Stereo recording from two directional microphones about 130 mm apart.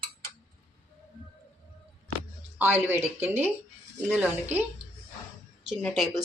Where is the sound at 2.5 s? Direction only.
15° right (ahead or behind).